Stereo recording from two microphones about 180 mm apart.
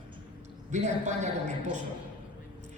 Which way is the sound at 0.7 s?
40° right (ahead or behind).